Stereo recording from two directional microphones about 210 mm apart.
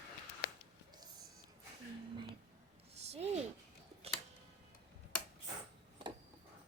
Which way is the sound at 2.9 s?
30° right (ahead or behind).